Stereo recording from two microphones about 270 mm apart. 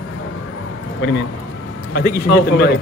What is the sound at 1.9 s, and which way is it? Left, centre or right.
Speech, left.